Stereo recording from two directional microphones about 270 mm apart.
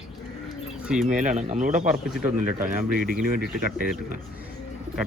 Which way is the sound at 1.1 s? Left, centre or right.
Right.